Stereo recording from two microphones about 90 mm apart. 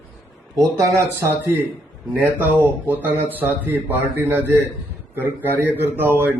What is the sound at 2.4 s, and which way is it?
Speech, 20° right (ahead or behind).